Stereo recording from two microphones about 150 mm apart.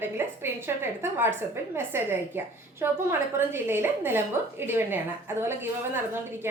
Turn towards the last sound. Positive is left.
turn(degrees=-15)  # may be behind; listen again after turning